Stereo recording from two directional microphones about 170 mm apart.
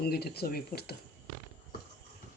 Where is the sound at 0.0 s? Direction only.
70° left (ahead or behind).